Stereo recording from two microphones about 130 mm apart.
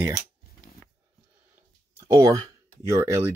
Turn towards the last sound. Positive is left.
turn(degrees=-20)  # may be behind; listen again after turning